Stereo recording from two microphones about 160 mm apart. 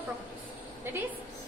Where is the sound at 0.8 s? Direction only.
15° right (ahead or behind).